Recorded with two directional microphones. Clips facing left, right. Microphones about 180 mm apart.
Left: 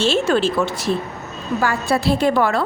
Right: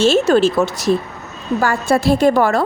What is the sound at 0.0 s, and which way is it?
A woman's voice, 45° right (ahead or behind).